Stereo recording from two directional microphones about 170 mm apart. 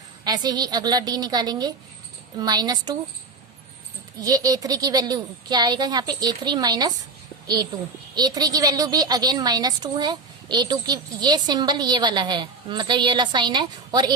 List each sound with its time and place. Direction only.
0.3 s a woman's voice: 25° right (ahead or behind)
4.2 s a woman's voice: 20° right (ahead or behind)